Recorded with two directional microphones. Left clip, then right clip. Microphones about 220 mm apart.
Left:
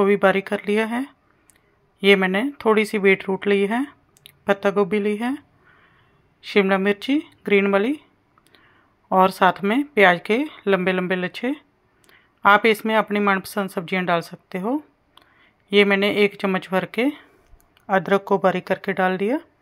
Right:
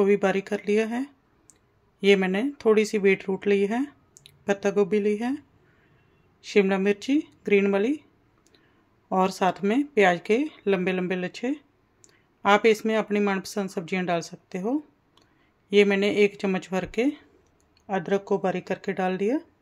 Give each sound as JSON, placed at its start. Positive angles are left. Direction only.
{"t": 0.0, "sound": "speech", "side_deg": 0}
{"t": 6.4, "sound": "speech", "side_deg": 0}